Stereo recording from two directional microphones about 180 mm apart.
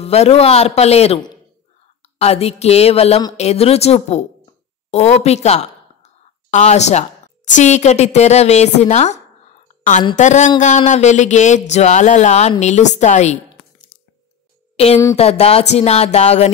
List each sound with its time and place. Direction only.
0.0 s speech: 35° left (ahead or behind)
15.1 s speech: 35° left (ahead or behind)